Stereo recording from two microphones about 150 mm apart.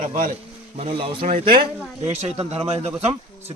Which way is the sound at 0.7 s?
40° right (ahead or behind).